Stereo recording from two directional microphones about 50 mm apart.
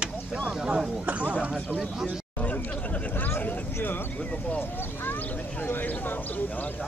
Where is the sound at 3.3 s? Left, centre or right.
Left.